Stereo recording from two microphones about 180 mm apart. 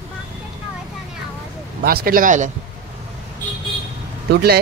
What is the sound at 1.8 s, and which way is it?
Speech, 55° right (ahead or behind).